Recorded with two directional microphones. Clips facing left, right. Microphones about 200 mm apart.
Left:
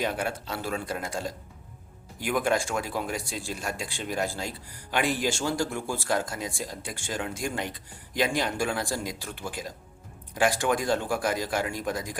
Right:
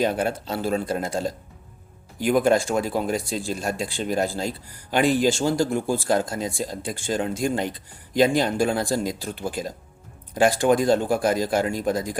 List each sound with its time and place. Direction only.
0.0 s speech: 30° right (ahead or behind)
2.2 s speech: 35° right (ahead or behind)